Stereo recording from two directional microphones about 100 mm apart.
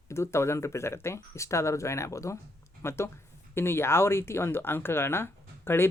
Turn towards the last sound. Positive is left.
turn(degrees=25)  # may be behind; listen again after turning